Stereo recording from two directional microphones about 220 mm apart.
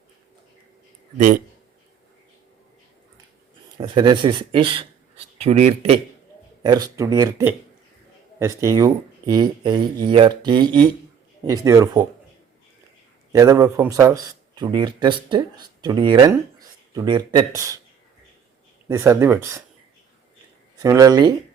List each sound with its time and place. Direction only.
3.8 s speech: 20° right (ahead or behind)
6.6 s speech: 20° right (ahead or behind)
13.3 s speech: 15° right (ahead or behind)
18.9 s speech: 15° right (ahead or behind)
20.8 s speech: 15° right (ahead or behind)